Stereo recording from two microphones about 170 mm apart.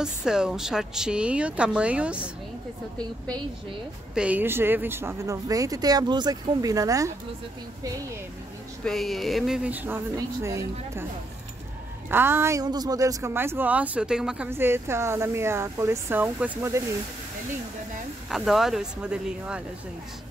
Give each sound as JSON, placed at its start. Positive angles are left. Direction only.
{"t": 0.0, "sound": "speech", "side_deg": -5}
{"t": 4.1, "sound": "speech", "side_deg": -5}
{"t": 8.8, "sound": "speech", "side_deg": 0}
{"t": 12.1, "sound": "speech", "side_deg": -15}
{"t": 18.3, "sound": "speech", "side_deg": 0}